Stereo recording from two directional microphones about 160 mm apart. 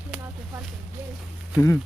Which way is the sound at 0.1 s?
15° right (ahead or behind).